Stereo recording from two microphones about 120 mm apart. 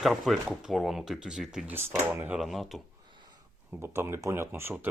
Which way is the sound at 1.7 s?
20° right (ahead or behind).